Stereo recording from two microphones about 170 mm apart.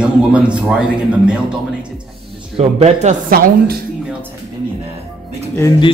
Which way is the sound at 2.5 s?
40° right (ahead or behind).